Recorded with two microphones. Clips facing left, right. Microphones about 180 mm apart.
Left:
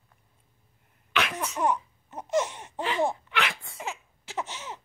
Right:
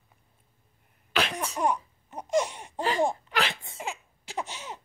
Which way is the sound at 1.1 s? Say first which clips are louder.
Right 1 dB; 35° right (ahead or behind).